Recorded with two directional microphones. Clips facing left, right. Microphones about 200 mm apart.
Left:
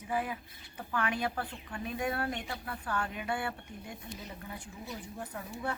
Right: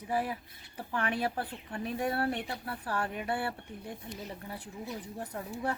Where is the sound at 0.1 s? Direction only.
35° right (ahead or behind).